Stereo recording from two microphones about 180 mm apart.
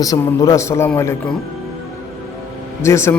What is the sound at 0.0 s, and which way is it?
A man's voice, 20° left (ahead or behind).